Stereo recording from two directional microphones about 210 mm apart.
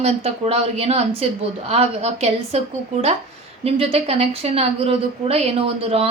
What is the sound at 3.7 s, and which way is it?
A woman's voice, 30° right (ahead or behind).